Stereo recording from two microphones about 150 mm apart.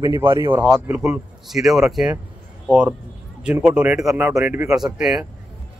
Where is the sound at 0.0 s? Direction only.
20° right (ahead or behind); by 2.1 s 5° right (ahead or behind).